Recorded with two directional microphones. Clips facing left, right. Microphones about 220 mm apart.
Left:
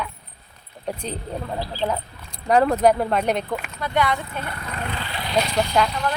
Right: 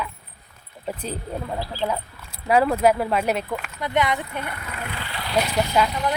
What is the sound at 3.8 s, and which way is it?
Speech, 20° right (ahead or behind).